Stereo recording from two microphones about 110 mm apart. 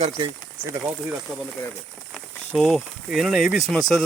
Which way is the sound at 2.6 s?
Centre (ahead or behind).